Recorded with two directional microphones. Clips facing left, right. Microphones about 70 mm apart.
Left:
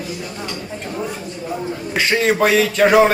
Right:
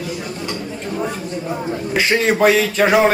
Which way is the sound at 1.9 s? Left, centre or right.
Centre.